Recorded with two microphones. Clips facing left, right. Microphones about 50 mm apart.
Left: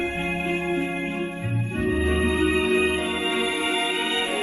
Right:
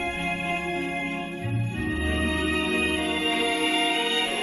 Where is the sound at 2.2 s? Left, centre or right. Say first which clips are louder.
Left 2 dB; centre.